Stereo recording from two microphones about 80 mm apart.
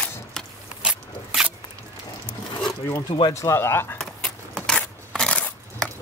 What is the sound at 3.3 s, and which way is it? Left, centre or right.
Speech, left.